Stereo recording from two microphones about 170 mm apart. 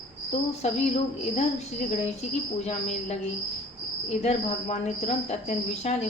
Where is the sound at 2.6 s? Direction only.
40° left (ahead or behind).